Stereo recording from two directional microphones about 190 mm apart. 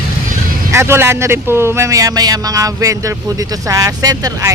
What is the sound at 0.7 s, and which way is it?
Speech, 15° right (ahead or behind).